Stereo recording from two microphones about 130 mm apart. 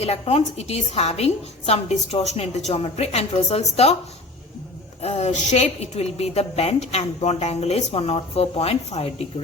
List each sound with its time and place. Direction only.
0.0 s a woman's voice: 50° left (ahead or behind)
5.0 s a woman's voice: 55° left (ahead or behind)